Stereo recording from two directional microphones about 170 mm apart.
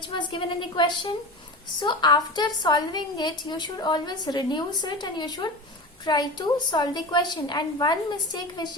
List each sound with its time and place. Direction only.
0.1 s a woman's voice: 30° left (ahead or behind)